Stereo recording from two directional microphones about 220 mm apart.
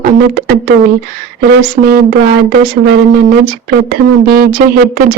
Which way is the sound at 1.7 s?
45° right (ahead or behind).